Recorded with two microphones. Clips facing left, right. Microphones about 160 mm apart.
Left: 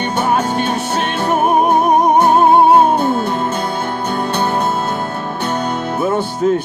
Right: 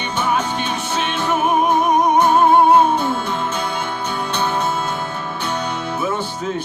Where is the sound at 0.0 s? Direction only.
45° left (ahead or behind).